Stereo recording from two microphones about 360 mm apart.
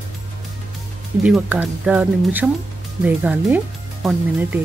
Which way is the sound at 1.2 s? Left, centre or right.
Centre.